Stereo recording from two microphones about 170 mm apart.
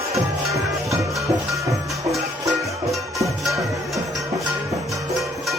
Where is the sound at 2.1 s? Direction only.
Centre (ahead or behind).